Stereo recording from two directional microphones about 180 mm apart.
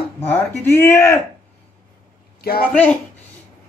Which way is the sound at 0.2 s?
10° left (ahead or behind).